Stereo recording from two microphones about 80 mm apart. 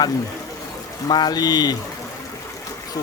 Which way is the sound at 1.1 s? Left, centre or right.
Left.